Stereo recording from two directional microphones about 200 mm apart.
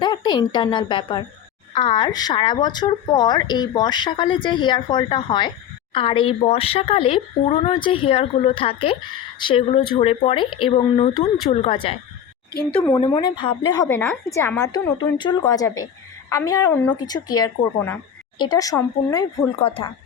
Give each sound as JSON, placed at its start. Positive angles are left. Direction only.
{"t": 0.0, "sound": "a woman's voice", "side_deg": 20}
{"t": 13.1, "sound": "speech", "side_deg": 25}
{"t": 13.7, "sound": "a woman's voice", "side_deg": 10}